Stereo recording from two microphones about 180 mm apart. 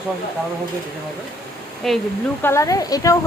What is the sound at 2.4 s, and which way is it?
Speech, 15° left (ahead or behind).